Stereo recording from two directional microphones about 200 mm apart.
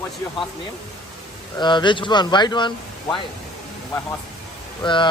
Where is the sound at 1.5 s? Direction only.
20° left (ahead or behind).